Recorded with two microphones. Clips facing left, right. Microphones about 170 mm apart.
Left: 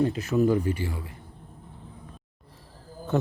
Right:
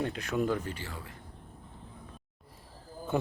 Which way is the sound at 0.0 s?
5° left (ahead or behind).